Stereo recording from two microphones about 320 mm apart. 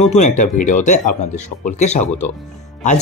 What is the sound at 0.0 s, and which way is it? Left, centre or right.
Speech, left.